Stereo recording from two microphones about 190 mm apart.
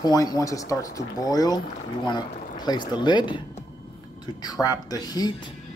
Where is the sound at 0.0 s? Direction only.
20° left (ahead or behind).